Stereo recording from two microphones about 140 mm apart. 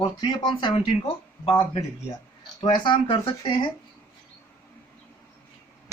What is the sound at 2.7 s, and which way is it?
Speech, 35° left (ahead or behind).